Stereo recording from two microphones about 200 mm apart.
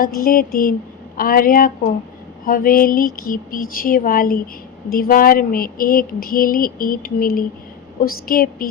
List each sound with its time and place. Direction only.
0.0 s speech: 45° left (ahead or behind)